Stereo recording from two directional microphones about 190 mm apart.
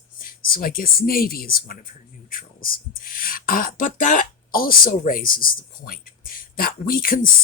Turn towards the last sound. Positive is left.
turn(degrees=45)  # may be behind; listen again after turning